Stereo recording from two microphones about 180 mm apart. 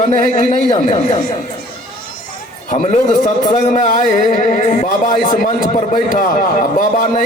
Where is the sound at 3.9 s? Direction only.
50° left (ahead or behind).